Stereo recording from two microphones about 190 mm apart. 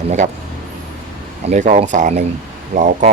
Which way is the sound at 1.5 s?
40° right (ahead or behind).